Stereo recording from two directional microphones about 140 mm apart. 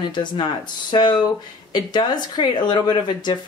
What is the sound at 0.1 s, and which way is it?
Speech, 30° left (ahead or behind).